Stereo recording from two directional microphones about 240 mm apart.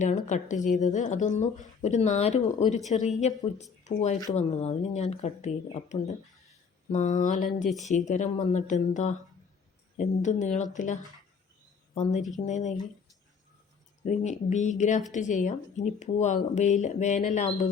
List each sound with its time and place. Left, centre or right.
0.0 s speech: left
7.7 s speech: centre
7.9 s speech: left
12.5 s speech: left
14.0 s speech: left